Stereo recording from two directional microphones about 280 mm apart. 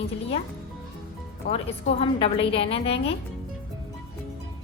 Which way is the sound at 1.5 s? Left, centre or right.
Left.